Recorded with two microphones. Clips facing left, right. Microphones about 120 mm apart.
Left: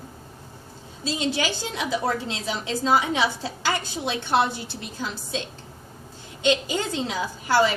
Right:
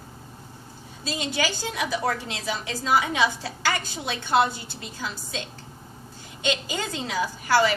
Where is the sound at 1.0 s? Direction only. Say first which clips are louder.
Left 2 dB; 25° left (ahead or behind).